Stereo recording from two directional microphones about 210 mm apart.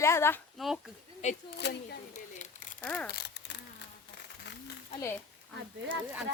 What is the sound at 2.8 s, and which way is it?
Speech, 5° left (ahead or behind).